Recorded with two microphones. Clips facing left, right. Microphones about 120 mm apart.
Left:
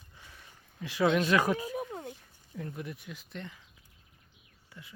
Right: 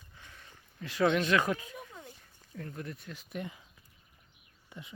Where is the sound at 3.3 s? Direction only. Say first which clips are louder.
Right 5 dB; 15° right (ahead or behind).